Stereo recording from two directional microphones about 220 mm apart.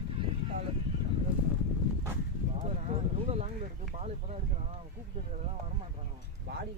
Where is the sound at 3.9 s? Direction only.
30° right (ahead or behind).